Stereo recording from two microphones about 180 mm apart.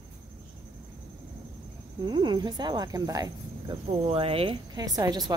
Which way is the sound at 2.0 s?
25° right (ahead or behind).